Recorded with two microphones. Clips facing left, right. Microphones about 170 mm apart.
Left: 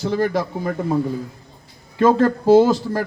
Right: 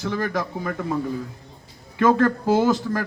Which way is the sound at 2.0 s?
30° left (ahead or behind).